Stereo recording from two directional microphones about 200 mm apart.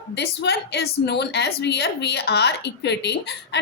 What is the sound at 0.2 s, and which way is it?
A woman's voice, 55° left (ahead or behind).